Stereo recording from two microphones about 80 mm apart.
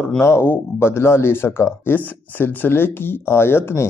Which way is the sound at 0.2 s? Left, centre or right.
Left.